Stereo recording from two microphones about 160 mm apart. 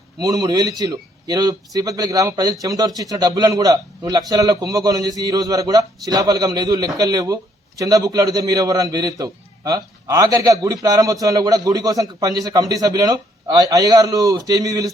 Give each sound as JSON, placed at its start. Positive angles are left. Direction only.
{"t": 0.2, "sound": "a man's voice", "side_deg": -25}